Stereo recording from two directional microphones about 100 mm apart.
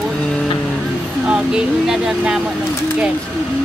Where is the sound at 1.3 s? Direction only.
10° right (ahead or behind).